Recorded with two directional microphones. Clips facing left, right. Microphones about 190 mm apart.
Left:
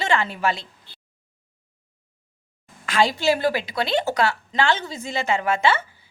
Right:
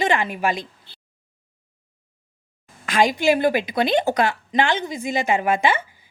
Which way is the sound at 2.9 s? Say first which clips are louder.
Right 2 dB; 15° right (ahead or behind).